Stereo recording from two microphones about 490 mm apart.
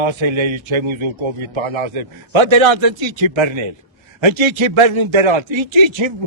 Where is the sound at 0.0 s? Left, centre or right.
Right.